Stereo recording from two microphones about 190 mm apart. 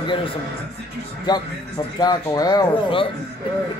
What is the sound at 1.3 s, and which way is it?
Speech, 20° left (ahead or behind).